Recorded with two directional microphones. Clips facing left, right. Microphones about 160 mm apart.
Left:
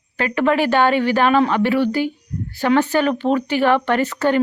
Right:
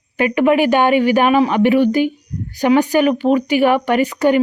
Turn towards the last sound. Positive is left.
turn(degrees=-15)  # may be behind; listen again after turning